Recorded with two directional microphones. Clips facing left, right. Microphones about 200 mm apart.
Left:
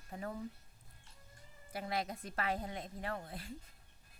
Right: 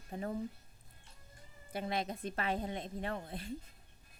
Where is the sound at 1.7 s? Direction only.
25° right (ahead or behind).